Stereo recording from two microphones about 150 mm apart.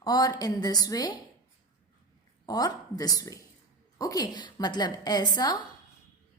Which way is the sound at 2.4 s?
25° left (ahead or behind).